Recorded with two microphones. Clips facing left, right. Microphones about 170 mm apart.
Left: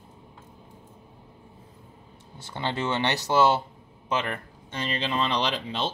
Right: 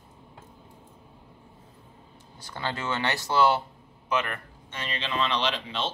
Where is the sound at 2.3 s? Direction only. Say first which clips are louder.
Left 3 dB; 25° left (ahead or behind); by 5.9 s 40° left (ahead or behind).